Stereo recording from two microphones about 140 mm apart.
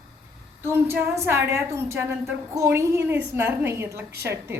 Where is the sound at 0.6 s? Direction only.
15° right (ahead or behind).